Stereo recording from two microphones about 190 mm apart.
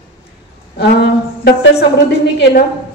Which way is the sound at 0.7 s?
60° left (ahead or behind).